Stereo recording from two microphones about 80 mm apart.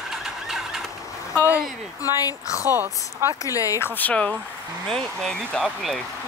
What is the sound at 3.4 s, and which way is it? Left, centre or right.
Speech, left.